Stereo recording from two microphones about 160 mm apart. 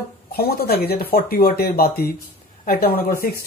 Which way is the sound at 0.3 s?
75° left (ahead or behind).